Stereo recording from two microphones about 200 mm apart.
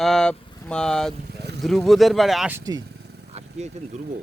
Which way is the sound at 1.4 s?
55° right (ahead or behind).